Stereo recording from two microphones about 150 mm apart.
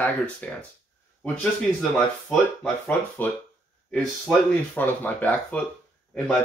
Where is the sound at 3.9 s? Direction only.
5° left (ahead or behind).